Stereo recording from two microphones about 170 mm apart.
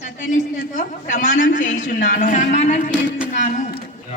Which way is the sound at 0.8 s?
50° left (ahead or behind).